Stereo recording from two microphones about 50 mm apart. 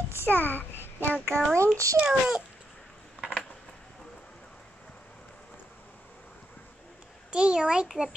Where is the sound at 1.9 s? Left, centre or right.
Centre.